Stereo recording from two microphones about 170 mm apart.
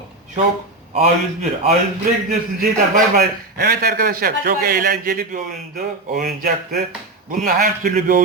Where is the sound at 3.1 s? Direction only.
65° right (ahead or behind).